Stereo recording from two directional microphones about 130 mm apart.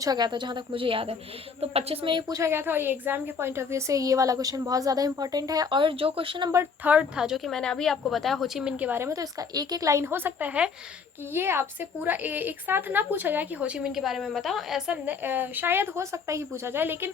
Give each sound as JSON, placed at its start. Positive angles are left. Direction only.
{"t": 0.0, "sound": "a woman's voice", "side_deg": -30}
{"t": 2.3, "sound": "a woman's voice", "side_deg": -20}
{"t": 6.5, "sound": "speech", "side_deg": -15}